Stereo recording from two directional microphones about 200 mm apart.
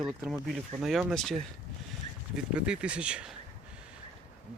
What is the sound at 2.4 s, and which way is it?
Speech, 5° right (ahead or behind).